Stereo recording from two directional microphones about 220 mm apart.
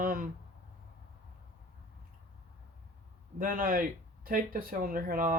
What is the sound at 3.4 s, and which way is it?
Speech, 40° right (ahead or behind).